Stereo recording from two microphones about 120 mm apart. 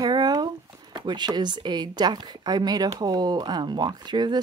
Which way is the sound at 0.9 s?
35° right (ahead or behind).